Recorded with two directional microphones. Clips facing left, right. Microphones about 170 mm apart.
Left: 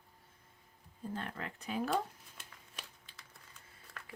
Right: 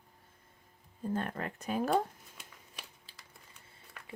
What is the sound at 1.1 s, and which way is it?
Speech, 50° right (ahead or behind).